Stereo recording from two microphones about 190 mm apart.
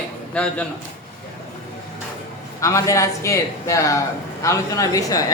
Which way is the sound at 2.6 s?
15° left (ahead or behind).